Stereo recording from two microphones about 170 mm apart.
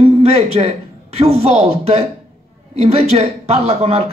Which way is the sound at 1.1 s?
35° right (ahead or behind).